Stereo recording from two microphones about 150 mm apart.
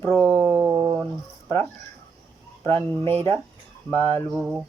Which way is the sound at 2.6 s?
15° left (ahead or behind).